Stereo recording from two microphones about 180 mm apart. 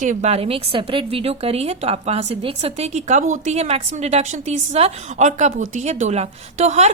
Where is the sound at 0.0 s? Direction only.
40° right (ahead or behind).